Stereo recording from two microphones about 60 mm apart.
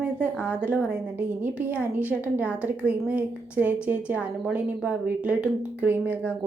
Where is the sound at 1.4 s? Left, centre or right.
Right.